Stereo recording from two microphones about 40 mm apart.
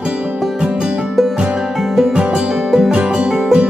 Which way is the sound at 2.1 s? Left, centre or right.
Right.